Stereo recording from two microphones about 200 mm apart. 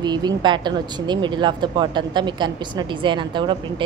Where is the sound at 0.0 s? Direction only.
20° right (ahead or behind).